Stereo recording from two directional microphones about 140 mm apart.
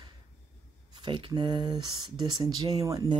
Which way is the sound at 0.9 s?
35° right (ahead or behind).